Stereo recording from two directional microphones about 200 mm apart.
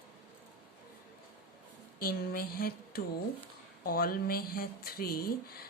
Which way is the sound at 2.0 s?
50° left (ahead or behind).